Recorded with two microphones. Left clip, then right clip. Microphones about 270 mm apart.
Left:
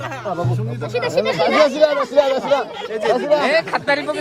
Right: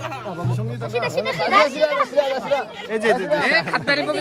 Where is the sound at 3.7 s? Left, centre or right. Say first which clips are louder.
Left 2 dB; centre.